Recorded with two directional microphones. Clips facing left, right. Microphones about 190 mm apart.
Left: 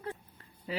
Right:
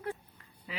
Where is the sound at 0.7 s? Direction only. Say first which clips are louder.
Left 7 dB; 35° left (ahead or behind).